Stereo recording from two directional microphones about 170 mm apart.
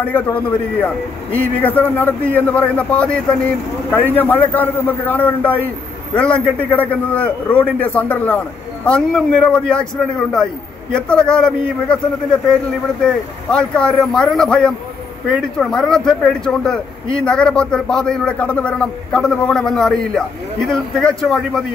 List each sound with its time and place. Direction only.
0.0 s a man's voice: 10° left (ahead or behind)
13.0 s a man's voice: 5° left (ahead or behind)